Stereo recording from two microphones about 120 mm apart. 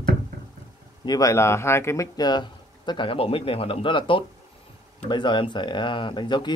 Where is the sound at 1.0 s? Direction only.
30° left (ahead or behind).